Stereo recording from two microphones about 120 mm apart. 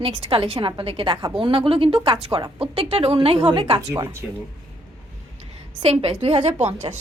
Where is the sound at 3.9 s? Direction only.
25° right (ahead or behind).